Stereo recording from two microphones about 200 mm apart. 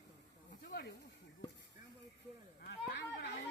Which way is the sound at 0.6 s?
55° left (ahead or behind).